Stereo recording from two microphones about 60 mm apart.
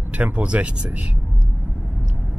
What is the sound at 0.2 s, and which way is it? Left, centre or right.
Speech, right.